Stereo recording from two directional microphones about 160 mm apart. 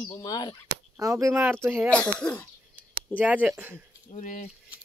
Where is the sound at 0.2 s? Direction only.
25° left (ahead or behind).